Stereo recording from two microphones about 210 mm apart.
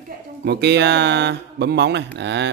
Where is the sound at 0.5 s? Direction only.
55° right (ahead or behind).